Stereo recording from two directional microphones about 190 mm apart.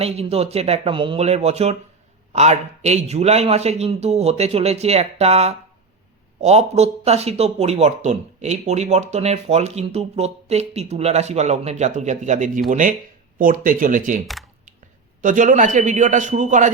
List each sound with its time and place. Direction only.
0.0 s speech: 30° right (ahead or behind)
15.2 s speech: 45° right (ahead or behind)